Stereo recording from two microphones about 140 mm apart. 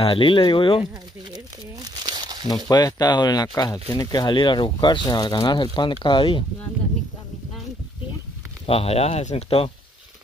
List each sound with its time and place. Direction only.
0.0 s speech: 40° left (ahead or behind)
1.3 s crumpling: 30° right (ahead or behind)
2.4 s speech: 30° left (ahead or behind)
8.6 s speech: 45° left (ahead or behind)